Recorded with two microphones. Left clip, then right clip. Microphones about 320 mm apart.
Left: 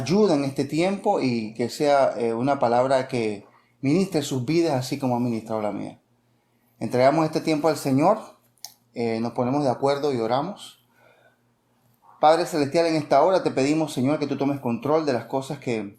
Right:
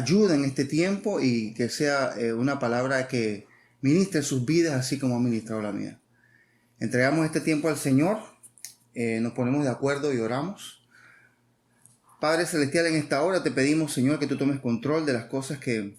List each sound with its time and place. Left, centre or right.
0.0 s speech: centre
9.2 s speech: left
9.5 s speech: centre
12.2 s speech: centre